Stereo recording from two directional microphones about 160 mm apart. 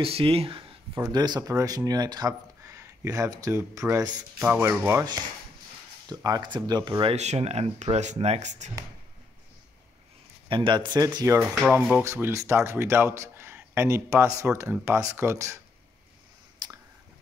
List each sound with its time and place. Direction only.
0.0 s speech: 35° right (ahead or behind)
0.9 s speech: 20° right (ahead or behind)
6.0 s speech: 25° right (ahead or behind); by 8.7 s 45° right (ahead or behind)
10.5 s speech: 30° right (ahead or behind)
16.6 s a sound: 25° right (ahead or behind)